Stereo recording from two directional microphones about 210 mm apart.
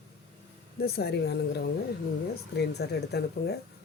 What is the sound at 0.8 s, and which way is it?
Speech, 50° left (ahead or behind).